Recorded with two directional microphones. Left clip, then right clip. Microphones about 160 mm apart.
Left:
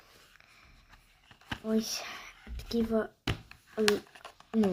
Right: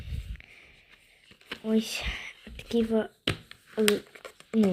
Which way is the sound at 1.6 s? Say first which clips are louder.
Right 4 dB; 20° right (ahead or behind).